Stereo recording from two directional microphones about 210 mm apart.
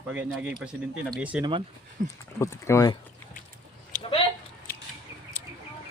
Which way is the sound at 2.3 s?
15° left (ahead or behind).